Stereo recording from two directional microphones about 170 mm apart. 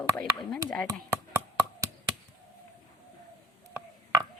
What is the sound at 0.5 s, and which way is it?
Speech, 5° left (ahead or behind).